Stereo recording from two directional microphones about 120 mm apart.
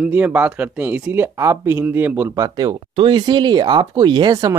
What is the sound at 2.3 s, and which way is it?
Speech, 30° right (ahead or behind).